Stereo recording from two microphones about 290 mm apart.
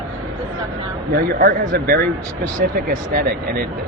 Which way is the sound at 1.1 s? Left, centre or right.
Right.